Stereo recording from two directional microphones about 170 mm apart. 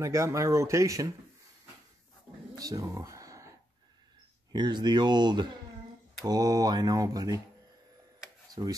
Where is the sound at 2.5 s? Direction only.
20° right (ahead or behind).